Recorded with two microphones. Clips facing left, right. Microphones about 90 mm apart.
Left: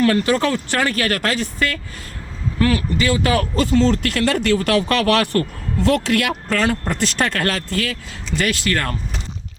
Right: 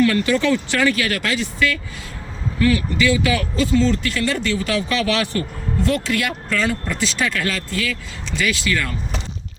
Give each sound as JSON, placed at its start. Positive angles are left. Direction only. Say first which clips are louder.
{"t": 0.0, "sound": "speech", "louder": "left 1 dB", "side_deg": 40}